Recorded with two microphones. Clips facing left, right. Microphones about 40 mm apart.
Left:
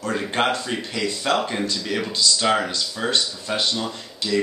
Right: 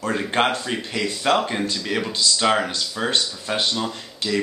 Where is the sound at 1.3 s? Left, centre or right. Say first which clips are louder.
Right 2 dB; centre.